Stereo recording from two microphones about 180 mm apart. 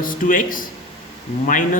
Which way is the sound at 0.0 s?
50° left (ahead or behind).